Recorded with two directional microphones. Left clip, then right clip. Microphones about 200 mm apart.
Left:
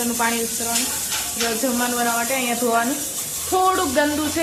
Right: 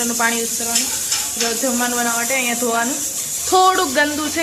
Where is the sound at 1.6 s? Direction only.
5° right (ahead or behind).